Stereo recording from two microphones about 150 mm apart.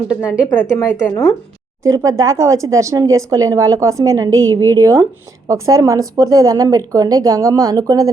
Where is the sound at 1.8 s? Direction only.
20° right (ahead or behind).